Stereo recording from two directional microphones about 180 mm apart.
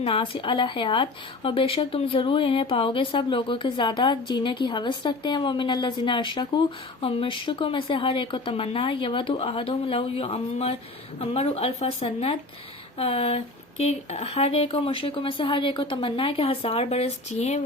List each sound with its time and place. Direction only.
0.0 s speech: 30° left (ahead or behind)